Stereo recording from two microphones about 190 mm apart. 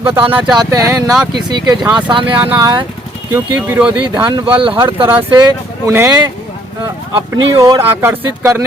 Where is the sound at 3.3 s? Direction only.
10° right (ahead or behind).